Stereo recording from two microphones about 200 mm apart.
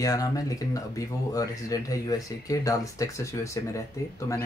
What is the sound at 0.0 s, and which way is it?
Speech, 15° left (ahead or behind).